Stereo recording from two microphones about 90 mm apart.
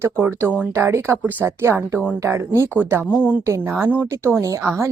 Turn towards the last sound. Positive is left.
turn(degrees=-25)  # may be behind; listen again after turning